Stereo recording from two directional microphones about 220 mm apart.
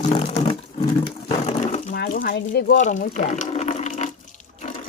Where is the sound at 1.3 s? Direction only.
30° left (ahead or behind).